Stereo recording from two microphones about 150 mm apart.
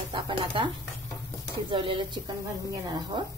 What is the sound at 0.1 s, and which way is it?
A woman's voice, 35° right (ahead or behind).